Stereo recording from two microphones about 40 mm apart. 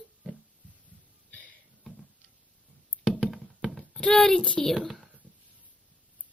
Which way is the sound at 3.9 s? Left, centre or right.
Centre.